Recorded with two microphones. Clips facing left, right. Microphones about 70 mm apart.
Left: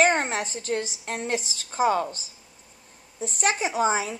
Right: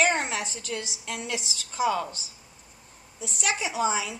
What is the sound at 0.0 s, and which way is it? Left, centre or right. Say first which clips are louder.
A woman's voice: left 3 dB; left.